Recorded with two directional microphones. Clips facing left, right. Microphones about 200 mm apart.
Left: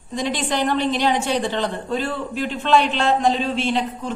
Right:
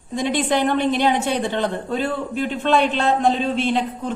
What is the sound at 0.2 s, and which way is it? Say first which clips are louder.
A woman's voice: right 3 dB; 55° right (ahead or behind).